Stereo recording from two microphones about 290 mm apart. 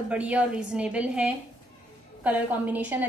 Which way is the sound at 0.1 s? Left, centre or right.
Centre.